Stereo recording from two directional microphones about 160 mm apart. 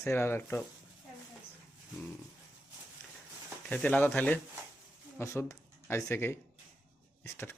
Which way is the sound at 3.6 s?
10° left (ahead or behind).